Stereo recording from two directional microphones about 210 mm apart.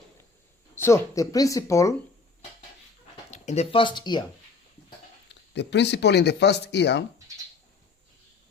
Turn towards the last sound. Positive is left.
turn(degrees=55)  # may be behind; listen again after turning